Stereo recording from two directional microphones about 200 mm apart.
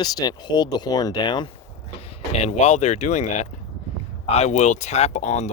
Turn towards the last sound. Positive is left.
turn(degrees=35)  # may be behind; listen again after turning